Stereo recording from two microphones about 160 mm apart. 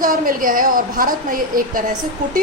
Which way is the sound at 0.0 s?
60° right (ahead or behind).